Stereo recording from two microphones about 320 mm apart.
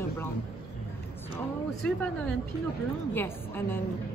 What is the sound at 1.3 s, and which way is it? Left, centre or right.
A woman's voice, centre.